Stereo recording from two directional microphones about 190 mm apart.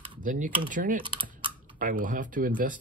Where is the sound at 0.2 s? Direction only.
45° right (ahead or behind).